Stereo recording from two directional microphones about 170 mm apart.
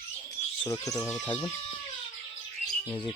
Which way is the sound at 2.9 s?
30° left (ahead or behind).